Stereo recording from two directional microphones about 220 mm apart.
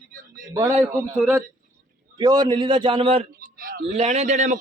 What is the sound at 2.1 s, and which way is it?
A man's voice, 15° right (ahead or behind).